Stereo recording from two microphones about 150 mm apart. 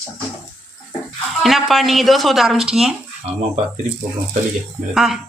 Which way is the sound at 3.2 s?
45° right (ahead or behind).